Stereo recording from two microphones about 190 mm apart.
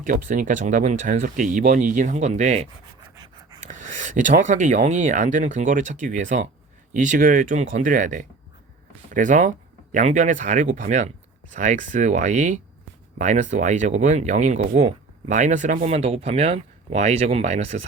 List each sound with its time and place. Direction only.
0.0 s speech: 45° right (ahead or behind)
3.7 s speech: 40° right (ahead or behind)